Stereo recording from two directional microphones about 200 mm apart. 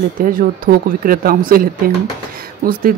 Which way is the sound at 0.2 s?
45° right (ahead or behind).